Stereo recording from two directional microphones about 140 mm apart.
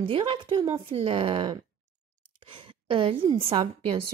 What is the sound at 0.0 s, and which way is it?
A woman's voice, 40° right (ahead or behind).